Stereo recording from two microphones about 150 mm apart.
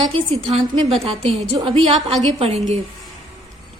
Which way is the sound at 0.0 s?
40° right (ahead or behind).